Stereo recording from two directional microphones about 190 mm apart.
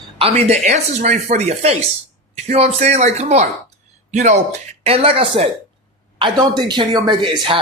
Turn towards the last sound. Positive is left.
turn(degrees=-25)  # may be behind; listen again after turning